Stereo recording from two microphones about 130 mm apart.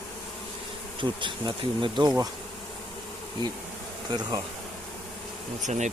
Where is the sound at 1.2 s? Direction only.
40° right (ahead or behind).